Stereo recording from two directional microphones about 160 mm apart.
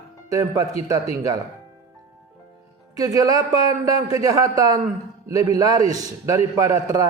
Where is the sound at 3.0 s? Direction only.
20° right (ahead or behind).